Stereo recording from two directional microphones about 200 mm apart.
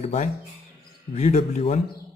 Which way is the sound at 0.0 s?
35° left (ahead or behind).